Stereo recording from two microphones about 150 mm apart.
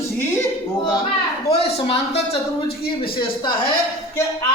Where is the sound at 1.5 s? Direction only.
40° left (ahead or behind).